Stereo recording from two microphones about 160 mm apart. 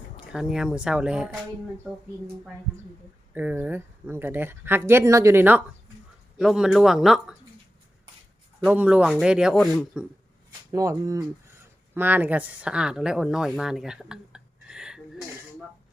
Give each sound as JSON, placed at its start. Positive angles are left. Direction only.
{"t": 0.3, "sound": "speech", "side_deg": -5}
{"t": 3.3, "sound": "speech", "side_deg": -10}
{"t": 8.6, "sound": "speech", "side_deg": -10}
{"t": 10.7, "sound": "speech", "side_deg": -20}